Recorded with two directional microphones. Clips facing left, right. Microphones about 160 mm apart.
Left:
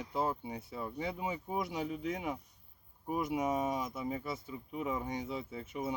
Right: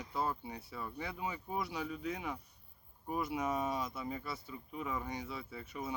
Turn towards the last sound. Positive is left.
turn(degrees=20)  # may be behind; listen again after turning